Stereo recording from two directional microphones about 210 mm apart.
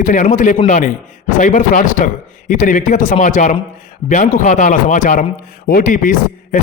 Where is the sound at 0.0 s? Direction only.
40° left (ahead or behind).